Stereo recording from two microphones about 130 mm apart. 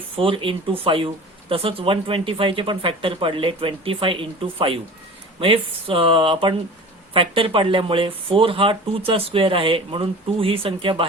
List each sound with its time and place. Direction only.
0.2 s speech: 45° right (ahead or behind)